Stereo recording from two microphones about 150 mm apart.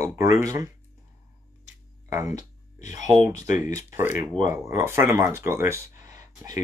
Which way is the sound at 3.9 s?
15° right (ahead or behind).